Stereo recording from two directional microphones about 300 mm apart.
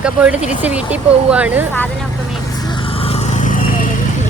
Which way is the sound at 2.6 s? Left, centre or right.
Centre.